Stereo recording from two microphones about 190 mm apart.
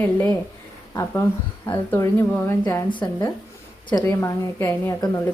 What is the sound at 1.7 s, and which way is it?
A woman's voice, 10° left (ahead or behind).